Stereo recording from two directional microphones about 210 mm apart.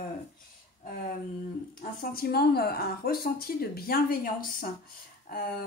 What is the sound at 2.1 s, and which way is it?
A woman's voice, 45° left (ahead or behind).